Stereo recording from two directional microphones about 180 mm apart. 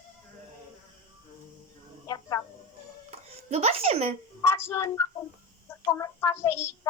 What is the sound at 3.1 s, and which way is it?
A child's voice, 35° right (ahead or behind).